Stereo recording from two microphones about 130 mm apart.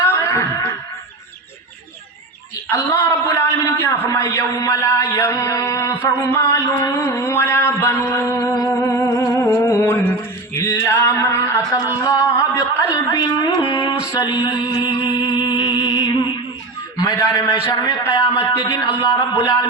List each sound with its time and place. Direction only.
0.0 s wail: 20° left (ahead or behind)
2.6 s a man's voice: 20° left (ahead or behind)
8.6 s music: 25° left (ahead or behind)
10.6 s a sound: 20° left (ahead or behind)
12.0 s music: 25° left (ahead or behind)
17.0 s a sound: 30° left (ahead or behind)
17.7 s a man's voice: 30° left (ahead or behind)
18.0 s music: 30° left (ahead or behind)
18.9 s a man's voice: 30° left (ahead or behind)
19.3 s music: 20° left (ahead or behind)